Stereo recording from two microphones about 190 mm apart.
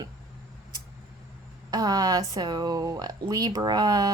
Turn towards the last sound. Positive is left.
turn(degrees=-20)  # may be behind; listen again after turning